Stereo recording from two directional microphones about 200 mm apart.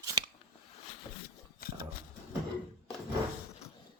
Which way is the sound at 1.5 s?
50° left (ahead or behind).